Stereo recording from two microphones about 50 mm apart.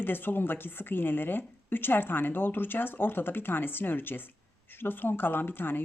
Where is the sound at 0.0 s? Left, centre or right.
Left.